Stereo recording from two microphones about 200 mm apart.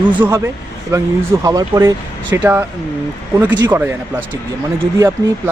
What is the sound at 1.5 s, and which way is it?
Speech, 15° right (ahead or behind).